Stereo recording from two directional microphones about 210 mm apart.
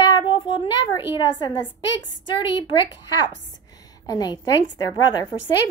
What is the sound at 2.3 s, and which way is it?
A woman's voice, 20° left (ahead or behind).